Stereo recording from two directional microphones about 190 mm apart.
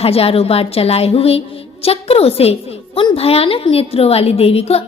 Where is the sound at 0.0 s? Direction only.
30° left (ahead or behind).